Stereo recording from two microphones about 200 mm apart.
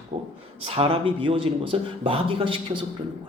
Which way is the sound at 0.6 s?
25° right (ahead or behind).